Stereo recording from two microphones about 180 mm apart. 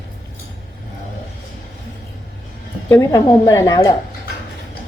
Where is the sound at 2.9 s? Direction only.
15° left (ahead or behind).